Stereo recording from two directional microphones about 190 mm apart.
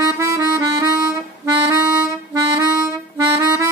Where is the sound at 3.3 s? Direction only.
15° right (ahead or behind).